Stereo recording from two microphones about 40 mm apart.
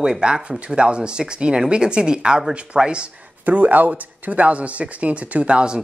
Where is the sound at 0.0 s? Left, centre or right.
Centre.